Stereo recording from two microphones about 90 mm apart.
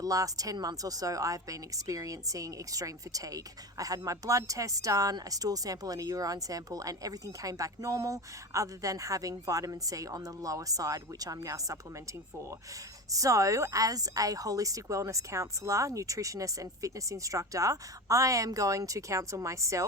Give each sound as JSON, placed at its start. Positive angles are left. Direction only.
{"t": 0.0, "sound": "a woman's voice", "side_deg": -40}
{"t": 13.1, "sound": "a woman's voice", "side_deg": -40}